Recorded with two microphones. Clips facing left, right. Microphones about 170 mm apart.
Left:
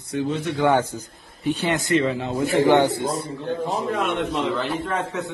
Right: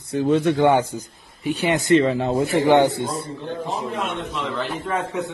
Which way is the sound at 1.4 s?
15° right (ahead or behind).